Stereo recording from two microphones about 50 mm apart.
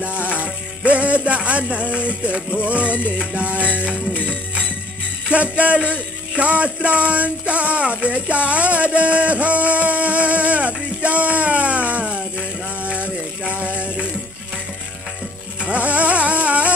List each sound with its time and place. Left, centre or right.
0.0 s music: right
4.1 s music: left
5.3 s speech: right
8.5 s music: right
13.4 s a sound: right
15.6 s music: right